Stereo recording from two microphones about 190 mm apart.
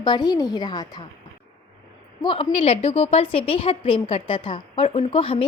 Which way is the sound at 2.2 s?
25° left (ahead or behind).